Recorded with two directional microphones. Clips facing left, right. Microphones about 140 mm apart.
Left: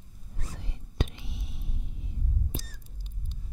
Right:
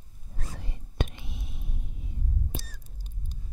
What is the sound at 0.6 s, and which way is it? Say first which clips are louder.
Whispering: even; 50° right (ahead or behind).